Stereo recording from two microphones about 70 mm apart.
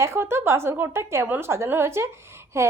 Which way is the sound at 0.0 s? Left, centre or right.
Right.